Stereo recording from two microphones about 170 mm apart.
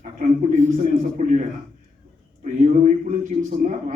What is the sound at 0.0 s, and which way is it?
Speech, 45° right (ahead or behind).